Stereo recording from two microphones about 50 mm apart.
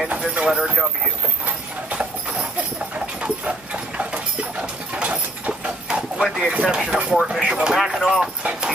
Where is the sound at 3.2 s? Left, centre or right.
Right.